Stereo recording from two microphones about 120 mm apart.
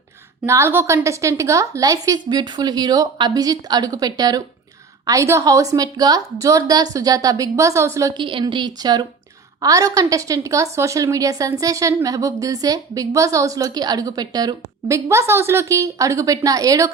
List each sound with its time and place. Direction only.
0.4 s a woman's voice: 25° right (ahead or behind)
8.1 s a woman's voice: 45° right (ahead or behind); by 16.9 s 30° right (ahead or behind)